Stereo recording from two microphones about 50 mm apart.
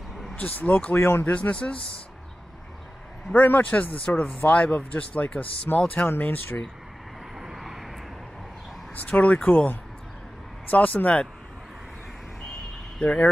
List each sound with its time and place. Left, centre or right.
0.4 s speech: left
0.9 s speech: left
1.2 s speech: left
1.5 s speech: left
3.3 s speech: left
7.3 s vehicle: centre
8.9 s speech: left
10.7 s speech: left
13.0 s speech: left